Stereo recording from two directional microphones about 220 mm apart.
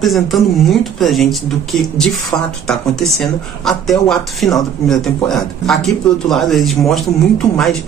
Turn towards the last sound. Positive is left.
turn(degrees=0)  # may be behind; listen again after turning